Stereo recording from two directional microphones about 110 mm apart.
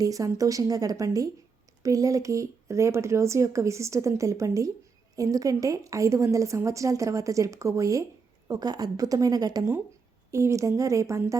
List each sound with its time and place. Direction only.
0.0 s speech: 30° right (ahead or behind)